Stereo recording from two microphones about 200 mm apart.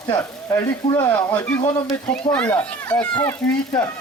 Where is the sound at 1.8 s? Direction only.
5° left (ahead or behind).